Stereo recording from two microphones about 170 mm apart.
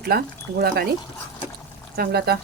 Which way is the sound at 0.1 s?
65° right (ahead or behind).